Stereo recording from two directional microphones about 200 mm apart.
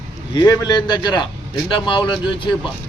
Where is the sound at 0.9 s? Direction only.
25° left (ahead or behind).